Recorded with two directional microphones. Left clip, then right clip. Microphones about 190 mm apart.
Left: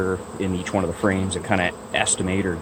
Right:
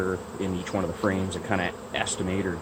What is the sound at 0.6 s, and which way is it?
Speech, 40° left (ahead or behind).